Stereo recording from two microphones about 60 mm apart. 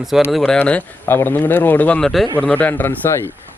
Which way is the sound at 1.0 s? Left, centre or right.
Left.